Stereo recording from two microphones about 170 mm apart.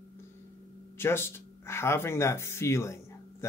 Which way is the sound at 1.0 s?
15° left (ahead or behind).